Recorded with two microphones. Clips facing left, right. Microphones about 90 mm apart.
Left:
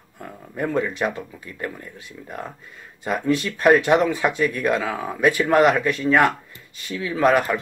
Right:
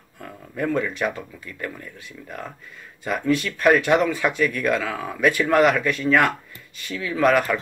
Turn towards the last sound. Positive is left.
turn(degrees=30)  # may be behind; listen again after turning